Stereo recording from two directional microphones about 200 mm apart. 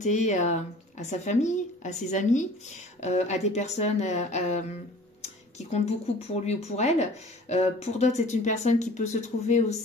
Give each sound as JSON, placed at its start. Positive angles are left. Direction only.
{"t": 0.0, "sound": "speech", "side_deg": 35}